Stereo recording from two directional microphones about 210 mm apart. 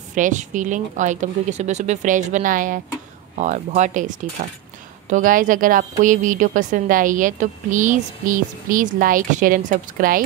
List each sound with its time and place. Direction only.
0.1 s a woman's voice: 35° right (ahead or behind)